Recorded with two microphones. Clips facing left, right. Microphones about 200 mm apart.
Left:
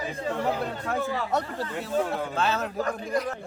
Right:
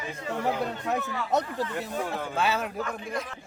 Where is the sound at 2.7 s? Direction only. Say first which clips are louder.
Left 4 dB; 40° left (ahead or behind).